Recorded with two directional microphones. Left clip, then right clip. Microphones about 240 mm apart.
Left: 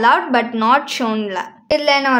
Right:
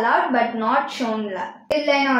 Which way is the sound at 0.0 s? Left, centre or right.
Left.